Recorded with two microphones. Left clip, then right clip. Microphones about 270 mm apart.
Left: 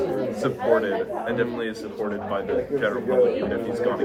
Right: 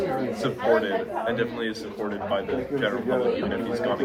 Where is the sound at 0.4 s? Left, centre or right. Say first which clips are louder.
Left 1 dB; centre.